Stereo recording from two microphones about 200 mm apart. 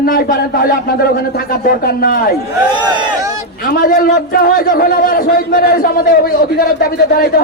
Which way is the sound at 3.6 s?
45° left (ahead or behind).